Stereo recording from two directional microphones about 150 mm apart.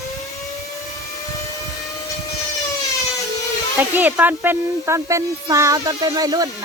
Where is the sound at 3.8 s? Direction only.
10° right (ahead or behind).